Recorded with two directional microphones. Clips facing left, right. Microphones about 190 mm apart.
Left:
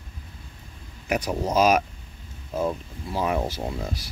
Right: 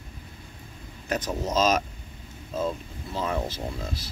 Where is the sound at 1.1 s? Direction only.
15° left (ahead or behind).